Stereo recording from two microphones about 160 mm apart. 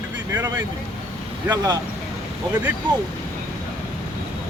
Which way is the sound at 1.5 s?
25° right (ahead or behind).